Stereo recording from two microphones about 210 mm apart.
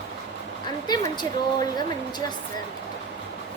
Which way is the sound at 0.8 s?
20° left (ahead or behind).